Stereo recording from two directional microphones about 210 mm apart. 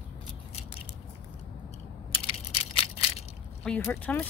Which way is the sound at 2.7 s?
25° left (ahead or behind).